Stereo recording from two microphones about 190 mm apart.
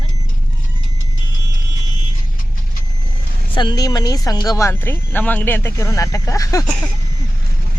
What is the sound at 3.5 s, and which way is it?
Speech, 20° left (ahead or behind).